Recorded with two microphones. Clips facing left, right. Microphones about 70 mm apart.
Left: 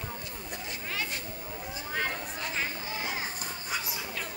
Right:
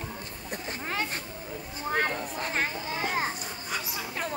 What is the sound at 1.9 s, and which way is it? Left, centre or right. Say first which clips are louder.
Children playing: right 5 dB; right.